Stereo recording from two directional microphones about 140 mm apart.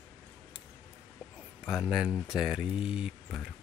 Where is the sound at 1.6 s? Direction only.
5° right (ahead or behind).